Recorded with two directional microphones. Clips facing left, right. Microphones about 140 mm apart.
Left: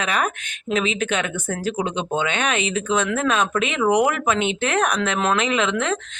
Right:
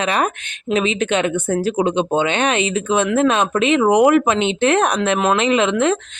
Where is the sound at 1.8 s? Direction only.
60° right (ahead or behind).